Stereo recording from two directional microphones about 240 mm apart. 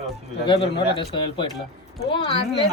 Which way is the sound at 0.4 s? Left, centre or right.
Left.